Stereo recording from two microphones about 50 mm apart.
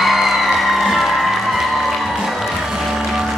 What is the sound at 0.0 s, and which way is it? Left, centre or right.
Music, centre.